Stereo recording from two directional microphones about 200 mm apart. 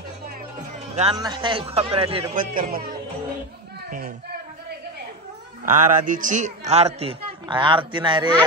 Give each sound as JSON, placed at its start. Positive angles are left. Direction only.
{"t": 1.1, "sound": "speech", "side_deg": -20}
{"t": 2.3, "sound": "speech", "side_deg": -40}
{"t": 5.7, "sound": "speech", "side_deg": -40}